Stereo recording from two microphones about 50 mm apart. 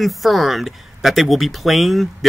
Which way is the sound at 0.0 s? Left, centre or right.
Centre.